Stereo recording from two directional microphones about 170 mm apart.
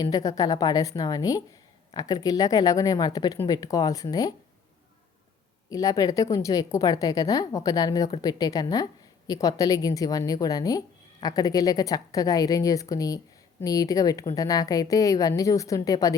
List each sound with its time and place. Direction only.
0.0 s a woman's voice: 20° left (ahead or behind)
5.6 s a woman's voice: 20° left (ahead or behind)